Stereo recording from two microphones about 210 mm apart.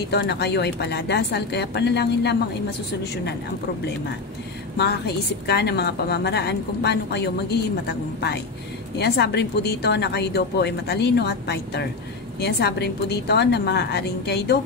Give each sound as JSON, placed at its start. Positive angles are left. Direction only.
{"t": 0.1, "sound": "a woman's voice", "side_deg": 50}
{"t": 4.7, "sound": "a woman's voice", "side_deg": 50}
{"t": 8.9, "sound": "a woman's voice", "side_deg": 50}